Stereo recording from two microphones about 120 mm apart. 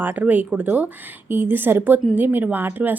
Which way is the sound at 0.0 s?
15° right (ahead or behind).